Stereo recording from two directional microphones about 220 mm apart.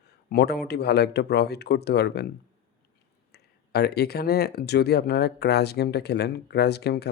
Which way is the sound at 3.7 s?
45° left (ahead or behind).